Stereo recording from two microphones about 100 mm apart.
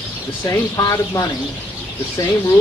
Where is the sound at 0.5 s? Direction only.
35° left (ahead or behind).